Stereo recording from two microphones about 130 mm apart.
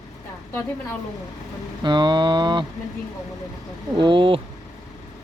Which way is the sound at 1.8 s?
35° right (ahead or behind).